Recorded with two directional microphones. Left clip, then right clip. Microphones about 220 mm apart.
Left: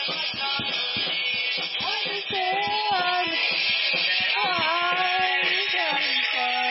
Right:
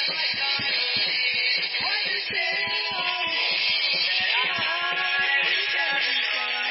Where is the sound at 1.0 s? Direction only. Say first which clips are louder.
Right 2 dB; 35° right (ahead or behind).